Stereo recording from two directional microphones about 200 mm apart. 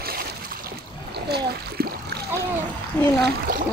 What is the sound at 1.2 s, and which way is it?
Splash, 55° right (ahead or behind).